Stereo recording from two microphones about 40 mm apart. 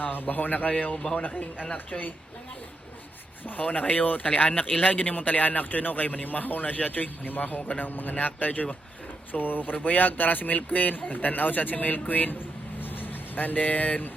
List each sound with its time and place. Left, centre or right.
0.0 s a man's voice: left
3.6 s a man's voice: left
8.1 s speech: left
9.3 s a man's voice: left